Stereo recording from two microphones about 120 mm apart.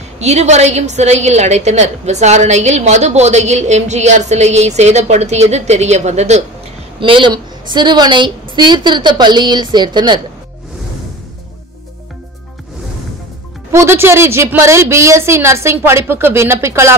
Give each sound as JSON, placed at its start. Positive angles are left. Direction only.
{"t": 0.2, "sound": "a woman's voice", "side_deg": -70}
{"t": 7.0, "sound": "a woman's voice", "side_deg": -45}
{"t": 13.7, "sound": "a woman's voice", "side_deg": -20}